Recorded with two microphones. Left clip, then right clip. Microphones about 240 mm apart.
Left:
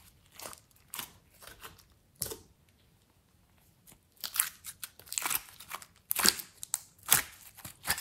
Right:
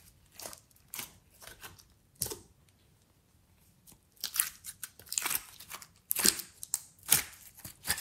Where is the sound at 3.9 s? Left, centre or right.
Centre.